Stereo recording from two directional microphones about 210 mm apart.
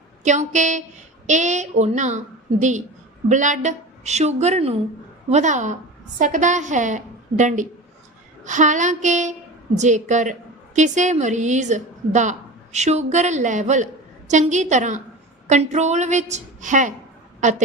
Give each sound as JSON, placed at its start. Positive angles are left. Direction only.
{"t": 0.3, "sound": "a woman's voice", "side_deg": -35}